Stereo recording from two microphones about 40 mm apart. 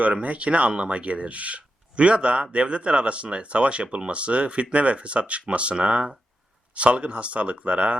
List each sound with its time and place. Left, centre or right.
0.0 s speech: right